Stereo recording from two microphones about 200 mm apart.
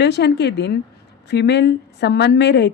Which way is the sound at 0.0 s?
55° left (ahead or behind).